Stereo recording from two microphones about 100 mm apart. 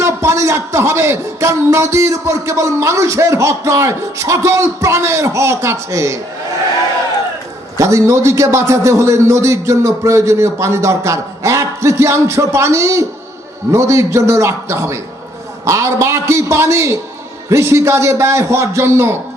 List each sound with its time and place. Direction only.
0.0 s a man's voice: 30° right (ahead or behind)
7.8 s a man's voice: 30° right (ahead or behind)